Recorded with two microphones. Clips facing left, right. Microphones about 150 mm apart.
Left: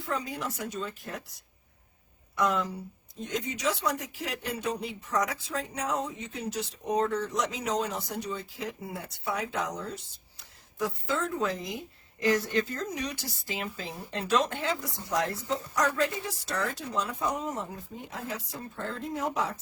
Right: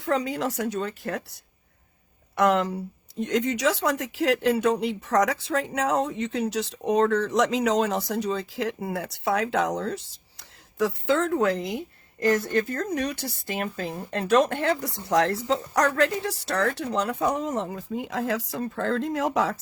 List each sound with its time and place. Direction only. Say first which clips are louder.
0.0 s speech: right 8 dB; 90° right; by 11.8 s 70° right (ahead or behind)
12.2 s speech: right 4 dB; 50° right (ahead or behind); by 19.5 s 90° right